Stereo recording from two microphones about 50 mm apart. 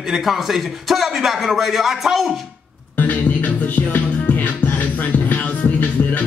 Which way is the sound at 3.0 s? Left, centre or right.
Left.